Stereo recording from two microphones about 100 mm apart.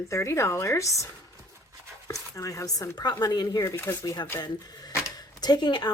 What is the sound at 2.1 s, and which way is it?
Speech, 30° left (ahead or behind).